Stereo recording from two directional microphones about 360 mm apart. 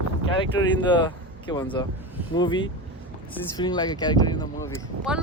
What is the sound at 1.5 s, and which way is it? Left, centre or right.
Speech, centre.